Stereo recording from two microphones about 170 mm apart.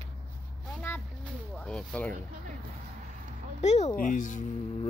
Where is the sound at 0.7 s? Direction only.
10° left (ahead or behind).